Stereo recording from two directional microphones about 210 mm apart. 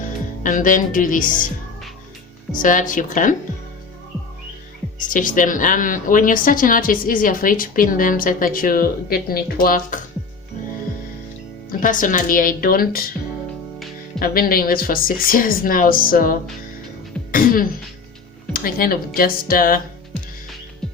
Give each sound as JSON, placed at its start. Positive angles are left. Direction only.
{"t": 0.4, "sound": "a woman's voice", "side_deg": 40}
{"t": 2.5, "sound": "a woman's voice", "side_deg": 40}
{"t": 4.9, "sound": "a woman's voice", "side_deg": 40}
{"t": 11.8, "sound": "a woman's voice", "side_deg": 40}
{"t": 14.2, "sound": "a woman's voice", "side_deg": 45}
{"t": 20.8, "sound": "music", "side_deg": 0}